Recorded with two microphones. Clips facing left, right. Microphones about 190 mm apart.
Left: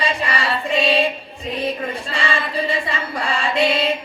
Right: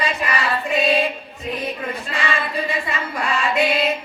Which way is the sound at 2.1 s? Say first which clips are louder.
Right 1 dB; 30° left (ahead or behind).